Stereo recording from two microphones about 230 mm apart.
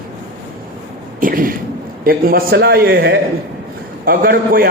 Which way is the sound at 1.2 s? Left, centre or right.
Right.